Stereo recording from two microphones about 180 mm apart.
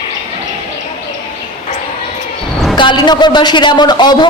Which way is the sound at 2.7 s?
25° left (ahead or behind).